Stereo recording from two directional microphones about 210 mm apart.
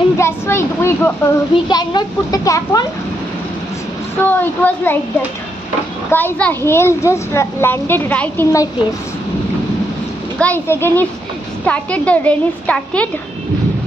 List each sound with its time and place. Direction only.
0.2 s a child's voice: 10° left (ahead or behind)
4.2 s a child's voice: 10° left (ahead or behind)
6.1 s a child's voice: 5° left (ahead or behind)
10.4 s a child's voice: 10° left (ahead or behind)